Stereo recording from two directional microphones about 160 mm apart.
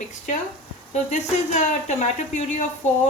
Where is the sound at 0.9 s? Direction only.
45° left (ahead or behind).